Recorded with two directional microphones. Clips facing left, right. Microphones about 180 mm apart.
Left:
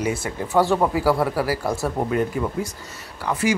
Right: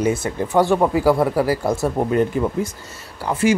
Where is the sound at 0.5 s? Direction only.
15° right (ahead or behind).